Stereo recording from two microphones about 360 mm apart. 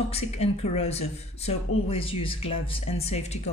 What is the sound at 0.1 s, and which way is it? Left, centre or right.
Speech, centre.